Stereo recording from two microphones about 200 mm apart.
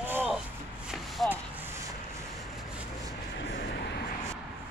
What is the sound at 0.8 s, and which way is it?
Shuffle, centre (ahead or behind).